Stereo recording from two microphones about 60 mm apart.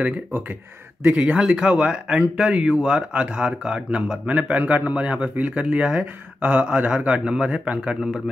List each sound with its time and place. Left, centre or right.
1.0 s speech: right
1.4 s speech: centre